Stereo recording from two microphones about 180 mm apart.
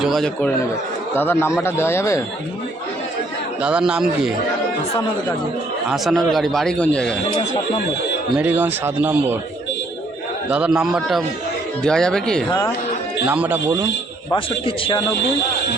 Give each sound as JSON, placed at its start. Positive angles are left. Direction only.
{"t": 0.0, "sound": "a man's voice", "side_deg": 0}
{"t": 1.1, "sound": "a man's voice", "side_deg": 10}
{"t": 3.6, "sound": "a man's voice", "side_deg": -5}
{"t": 5.9, "sound": "a man's voice", "side_deg": 0}
{"t": 8.4, "sound": "a man's voice", "side_deg": -10}
{"t": 10.5, "sound": "a man's voice", "side_deg": -5}
{"t": 13.2, "sound": "a man's voice", "side_deg": -10}
{"t": 14.3, "sound": "speech", "side_deg": 30}